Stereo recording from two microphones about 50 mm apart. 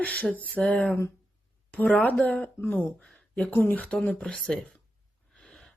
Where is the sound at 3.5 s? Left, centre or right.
Left.